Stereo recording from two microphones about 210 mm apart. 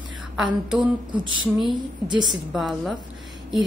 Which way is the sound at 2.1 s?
Centre (ahead or behind).